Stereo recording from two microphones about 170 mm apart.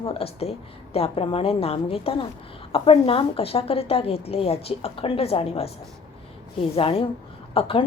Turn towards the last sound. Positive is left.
turn(degrees=35)  # may be behind; listen again after turning